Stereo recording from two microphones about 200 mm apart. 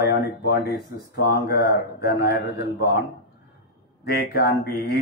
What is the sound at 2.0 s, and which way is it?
Speech, 50° left (ahead or behind).